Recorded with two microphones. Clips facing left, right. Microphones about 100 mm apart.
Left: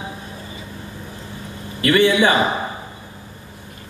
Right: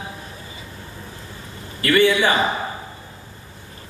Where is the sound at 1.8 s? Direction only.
20° left (ahead or behind).